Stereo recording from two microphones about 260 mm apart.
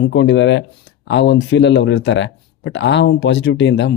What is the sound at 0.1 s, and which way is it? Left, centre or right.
Speech, left.